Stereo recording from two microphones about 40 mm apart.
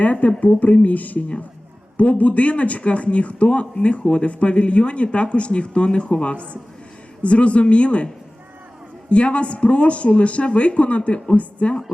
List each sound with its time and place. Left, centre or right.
0.0 s speech: left
9.0 s speech: left